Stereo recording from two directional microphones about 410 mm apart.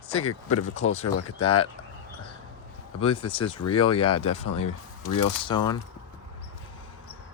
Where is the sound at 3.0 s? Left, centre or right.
Centre.